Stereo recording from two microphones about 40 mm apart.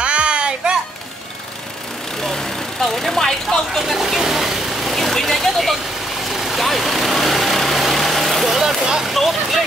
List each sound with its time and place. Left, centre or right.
0.0 s a sound: right
2.2 s vehicle: centre
3.8 s speech: centre
6.3 s vehicle: centre
8.6 s speech: centre
9.1 s speech: centre